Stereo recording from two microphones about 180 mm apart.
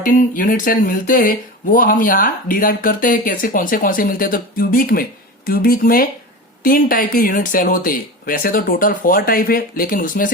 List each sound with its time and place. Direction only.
0.0 s speech: 50° left (ahead or behind)